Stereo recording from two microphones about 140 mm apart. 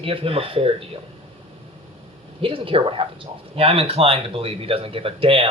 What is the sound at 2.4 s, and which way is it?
Speech, 40° right (ahead or behind).